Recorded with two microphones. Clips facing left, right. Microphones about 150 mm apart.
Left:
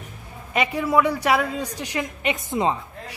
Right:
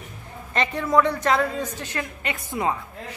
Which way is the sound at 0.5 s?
10° left (ahead or behind).